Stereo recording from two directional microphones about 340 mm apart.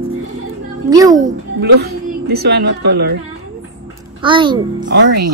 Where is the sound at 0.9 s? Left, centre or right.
Centre.